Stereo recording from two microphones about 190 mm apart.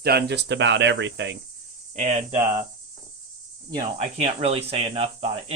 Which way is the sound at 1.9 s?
40° right (ahead or behind).